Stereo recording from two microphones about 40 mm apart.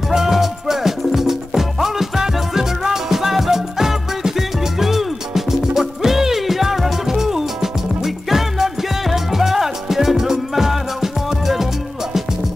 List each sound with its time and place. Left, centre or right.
0.1 s music: centre